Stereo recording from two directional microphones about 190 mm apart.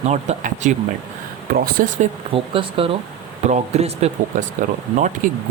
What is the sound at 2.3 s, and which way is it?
Speech, 30° right (ahead or behind).